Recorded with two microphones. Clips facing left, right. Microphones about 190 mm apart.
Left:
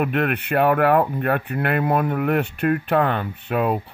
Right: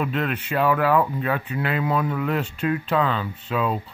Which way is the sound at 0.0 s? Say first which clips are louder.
Left 4 dB; 60° left (ahead or behind).